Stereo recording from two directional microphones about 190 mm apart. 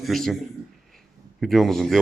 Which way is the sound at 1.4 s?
Centre (ahead or behind).